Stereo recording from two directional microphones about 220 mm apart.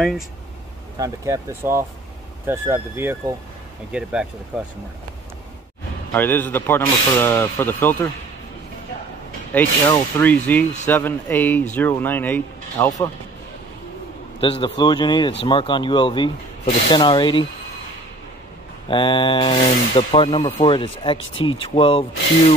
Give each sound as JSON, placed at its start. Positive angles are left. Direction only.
{"t": 0.9, "sound": "speech", "side_deg": -15}
{"t": 6.1, "sound": "speech", "side_deg": 10}
{"t": 9.5, "sound": "speech", "side_deg": 10}
{"t": 14.4, "sound": "speech", "side_deg": 20}
{"t": 18.9, "sound": "speech", "side_deg": 20}